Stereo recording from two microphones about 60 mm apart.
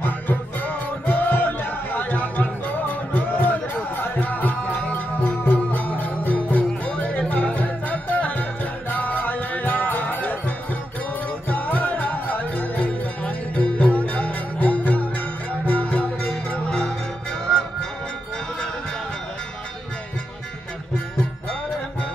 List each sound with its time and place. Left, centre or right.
0.0 s music: left
11.4 s music: left